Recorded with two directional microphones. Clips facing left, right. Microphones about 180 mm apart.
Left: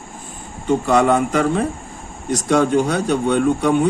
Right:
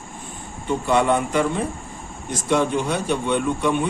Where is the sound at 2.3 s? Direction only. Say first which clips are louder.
Left 5 dB; 45° left (ahead or behind).